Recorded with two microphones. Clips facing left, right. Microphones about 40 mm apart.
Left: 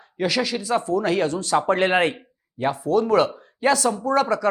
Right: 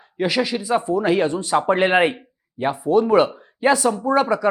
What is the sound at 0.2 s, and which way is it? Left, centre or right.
Speech, centre.